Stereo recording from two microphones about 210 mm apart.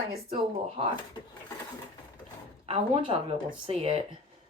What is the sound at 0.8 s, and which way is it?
Speech, 30° right (ahead or behind).